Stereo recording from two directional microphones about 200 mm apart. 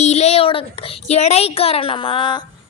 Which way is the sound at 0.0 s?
35° left (ahead or behind).